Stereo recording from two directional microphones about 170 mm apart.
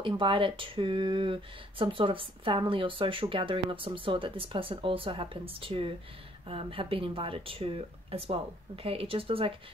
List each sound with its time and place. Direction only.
0.0 s speech: 30° right (ahead or behind)